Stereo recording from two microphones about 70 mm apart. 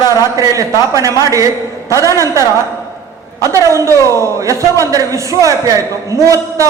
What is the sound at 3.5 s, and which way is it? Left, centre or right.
A man's voice, right.